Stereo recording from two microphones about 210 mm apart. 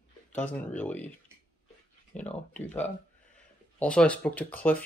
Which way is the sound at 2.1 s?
35° left (ahead or behind).